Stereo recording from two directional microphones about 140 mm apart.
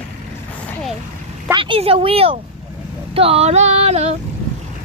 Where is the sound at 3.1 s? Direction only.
45° right (ahead or behind).